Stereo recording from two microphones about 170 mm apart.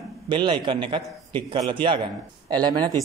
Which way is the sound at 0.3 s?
30° right (ahead or behind).